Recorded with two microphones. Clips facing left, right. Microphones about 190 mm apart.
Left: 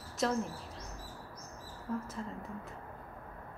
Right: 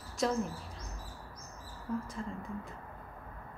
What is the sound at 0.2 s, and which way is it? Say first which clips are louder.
Speech: right 1 dB; centre (ahead or behind).